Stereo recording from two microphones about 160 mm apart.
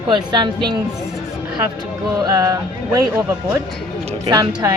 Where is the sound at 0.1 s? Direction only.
30° right (ahead or behind).